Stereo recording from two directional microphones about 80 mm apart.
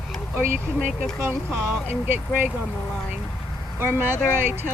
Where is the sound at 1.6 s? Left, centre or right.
Right.